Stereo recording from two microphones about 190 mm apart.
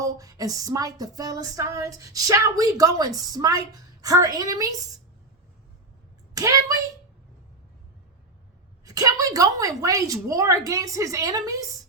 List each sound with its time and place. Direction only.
0.0 s a sound: 20° right (ahead or behind)
6.3 s a woman's voice: 15° right (ahead or behind)
8.8 s a woman's voice: 20° right (ahead or behind)